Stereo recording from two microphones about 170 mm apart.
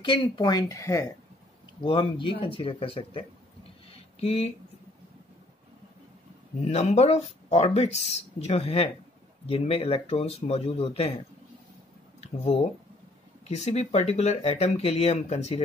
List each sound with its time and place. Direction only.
0.0 s speech: 30° left (ahead or behind)
1.8 s speech: 30° left (ahead or behind)
6.6 s speech: 40° left (ahead or behind)
12.2 s speech: 40° left (ahead or behind)